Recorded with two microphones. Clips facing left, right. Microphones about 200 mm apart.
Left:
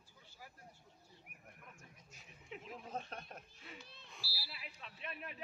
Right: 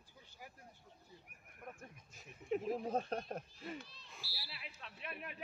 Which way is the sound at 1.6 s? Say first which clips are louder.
Right 8 dB; 50° right (ahead or behind).